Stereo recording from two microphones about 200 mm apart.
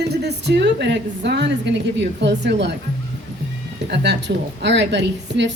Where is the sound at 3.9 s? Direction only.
60° right (ahead or behind).